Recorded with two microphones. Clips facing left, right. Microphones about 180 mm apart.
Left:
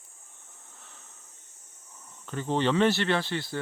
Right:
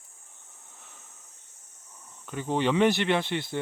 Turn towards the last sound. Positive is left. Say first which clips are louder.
# right 1 dB
turn(degrees=-20)  # may be behind; listen again after turning